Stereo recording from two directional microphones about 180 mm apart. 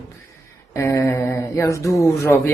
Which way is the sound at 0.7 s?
15° left (ahead or behind).